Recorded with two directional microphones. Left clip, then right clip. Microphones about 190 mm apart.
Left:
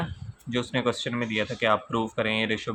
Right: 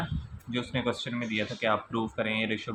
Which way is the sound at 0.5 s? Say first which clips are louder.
Left 4 dB; 25° left (ahead or behind).